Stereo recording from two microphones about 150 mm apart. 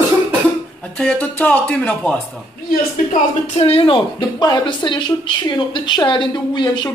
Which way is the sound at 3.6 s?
40° left (ahead or behind).